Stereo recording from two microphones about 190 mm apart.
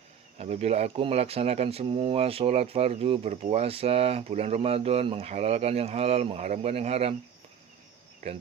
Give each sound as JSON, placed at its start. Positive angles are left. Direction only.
{"t": 0.3, "sound": "speech", "side_deg": -35}